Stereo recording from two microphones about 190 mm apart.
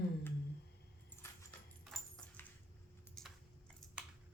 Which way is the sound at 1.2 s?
15° left (ahead or behind).